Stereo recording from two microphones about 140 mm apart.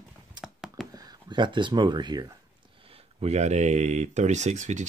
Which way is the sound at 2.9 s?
50° right (ahead or behind).